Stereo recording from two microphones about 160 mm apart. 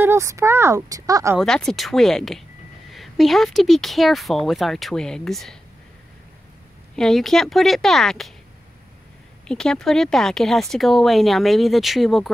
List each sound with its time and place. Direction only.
0.0 s speech: 15° right (ahead or behind)
1.4 s speech: 5° left (ahead or behind)
7.0 s speech: centre (ahead or behind)
9.5 s speech: 5° left (ahead or behind)